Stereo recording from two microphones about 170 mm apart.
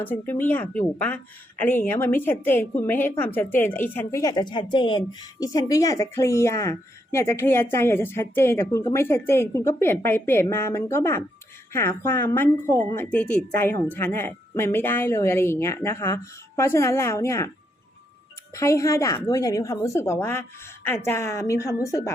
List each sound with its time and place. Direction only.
0.0 s a woman's voice: 10° left (ahead or behind)
18.5 s a woman's voice: 15° left (ahead or behind)